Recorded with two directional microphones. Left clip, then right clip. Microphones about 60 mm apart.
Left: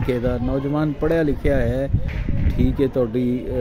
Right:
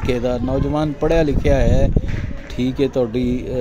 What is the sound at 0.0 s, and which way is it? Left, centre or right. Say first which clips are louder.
Speech: right 2 dB; left.